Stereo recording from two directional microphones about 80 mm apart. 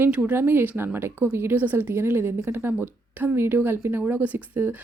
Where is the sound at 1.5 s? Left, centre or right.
Right.